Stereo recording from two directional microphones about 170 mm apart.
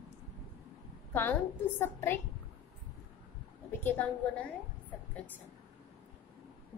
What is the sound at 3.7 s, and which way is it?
Speech, 10° left (ahead or behind).